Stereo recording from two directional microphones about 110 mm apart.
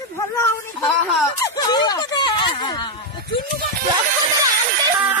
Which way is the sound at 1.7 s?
40° left (ahead or behind).